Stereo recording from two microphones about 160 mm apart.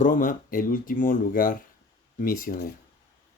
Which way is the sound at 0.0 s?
55° left (ahead or behind).